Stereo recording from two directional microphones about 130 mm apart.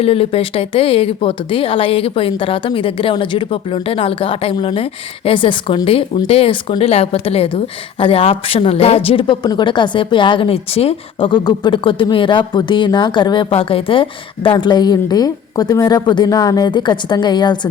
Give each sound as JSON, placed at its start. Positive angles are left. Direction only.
{"t": 0.0, "sound": "speech", "side_deg": 45}
{"t": 11.3, "sound": "speech", "side_deg": 35}